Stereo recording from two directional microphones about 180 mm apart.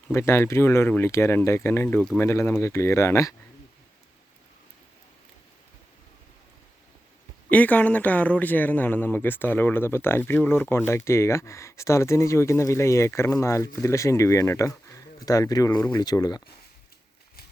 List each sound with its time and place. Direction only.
0.1 s speech: 15° left (ahead or behind)
7.5 s speech: 10° left (ahead or behind)